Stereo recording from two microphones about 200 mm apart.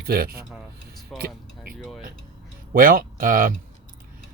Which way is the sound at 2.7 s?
45° right (ahead or behind).